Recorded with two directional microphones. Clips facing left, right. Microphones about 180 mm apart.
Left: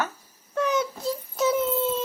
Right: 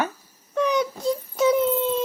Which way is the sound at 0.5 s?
5° left (ahead or behind).